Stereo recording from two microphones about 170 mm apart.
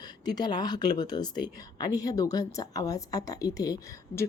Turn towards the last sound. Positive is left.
turn(degrees=20)  # may be behind; listen again after turning